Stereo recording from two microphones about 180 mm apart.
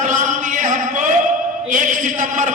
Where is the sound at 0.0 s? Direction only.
45° right (ahead or behind).